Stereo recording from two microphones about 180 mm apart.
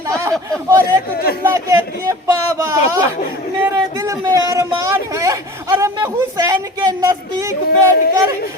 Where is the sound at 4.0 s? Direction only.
20° right (ahead or behind).